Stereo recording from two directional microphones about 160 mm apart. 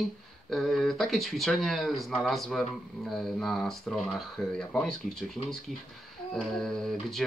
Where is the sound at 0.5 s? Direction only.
Centre (ahead or behind).